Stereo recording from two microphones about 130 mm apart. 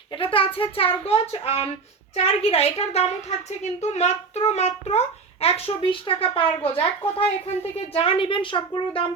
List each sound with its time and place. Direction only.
0.1 s a woman's voice: 45° left (ahead or behind)